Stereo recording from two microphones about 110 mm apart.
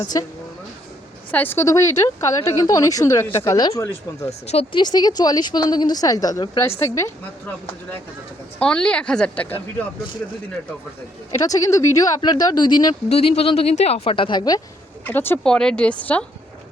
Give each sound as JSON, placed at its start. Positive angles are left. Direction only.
{"t": 0.0, "sound": "speech", "side_deg": 35}
{"t": 1.3, "sound": "a woman's voice", "side_deg": 15}
{"t": 1.6, "sound": "speech", "side_deg": 30}
{"t": 4.3, "sound": "speech", "side_deg": 75}
{"t": 4.7, "sound": "speech", "side_deg": 40}
{"t": 8.5, "sound": "a woman's voice", "side_deg": 10}
{"t": 11.3, "sound": "speech", "side_deg": 30}
{"t": 13.1, "sound": "speech", "side_deg": 65}
{"t": 15.0, "sound": "speech", "side_deg": 20}
{"t": 15.4, "sound": "a woman's voice", "side_deg": 5}